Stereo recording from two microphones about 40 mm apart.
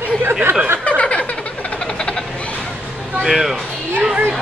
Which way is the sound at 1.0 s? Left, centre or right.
Left.